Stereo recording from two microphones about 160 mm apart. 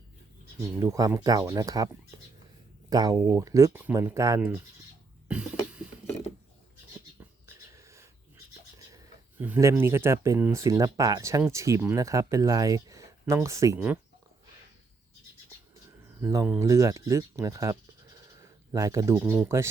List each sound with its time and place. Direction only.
0.8 s speech: 20° right (ahead or behind)
5.3 s cough: 5° right (ahead or behind)
7.4 s a sound: 20° right (ahead or behind)
9.4 s speech: 15° right (ahead or behind)
16.2 s speech: 20° right (ahead or behind)
18.3 s a sound: 20° right (ahead or behind)
19.2 s speech: 5° right (ahead or behind)
19.5 s speech: 15° right (ahead or behind)